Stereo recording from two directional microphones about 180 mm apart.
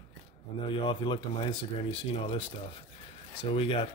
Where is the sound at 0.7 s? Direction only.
25° left (ahead or behind).